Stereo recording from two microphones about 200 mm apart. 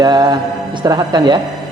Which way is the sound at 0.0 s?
20° right (ahead or behind).